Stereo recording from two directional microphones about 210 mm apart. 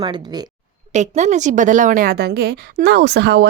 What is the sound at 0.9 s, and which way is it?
A woman's voice, 35° right (ahead or behind).